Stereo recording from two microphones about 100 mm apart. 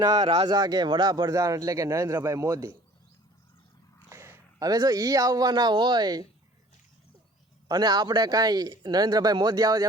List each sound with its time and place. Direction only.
0.0 s a man's voice: 40° right (ahead or behind)
4.1 s a sound: 25° right (ahead or behind)
4.7 s a man's voice: 40° right (ahead or behind)
7.7 s speech: 45° right (ahead or behind)